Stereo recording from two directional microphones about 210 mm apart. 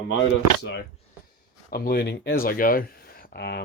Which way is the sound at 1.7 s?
45° left (ahead or behind).